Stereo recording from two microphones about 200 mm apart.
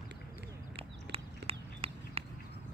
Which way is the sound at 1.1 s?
30° right (ahead or behind).